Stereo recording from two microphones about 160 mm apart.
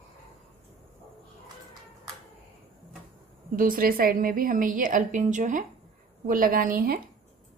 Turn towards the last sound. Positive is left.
turn(degrees=-65)  # may be behind; listen again after turning